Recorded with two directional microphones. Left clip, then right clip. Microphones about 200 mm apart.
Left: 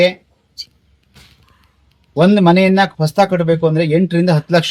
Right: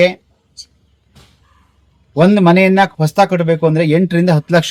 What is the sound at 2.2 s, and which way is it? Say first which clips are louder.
Speech: right 1 dB; 15° right (ahead or behind).